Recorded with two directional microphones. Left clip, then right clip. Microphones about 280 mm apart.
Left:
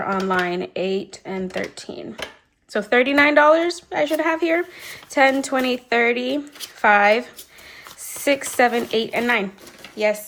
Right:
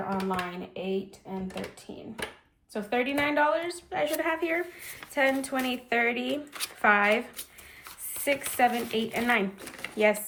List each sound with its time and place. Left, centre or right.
0.1 s a woman's voice: left
2.2 s a woman's voice: left
8.2 s speech: centre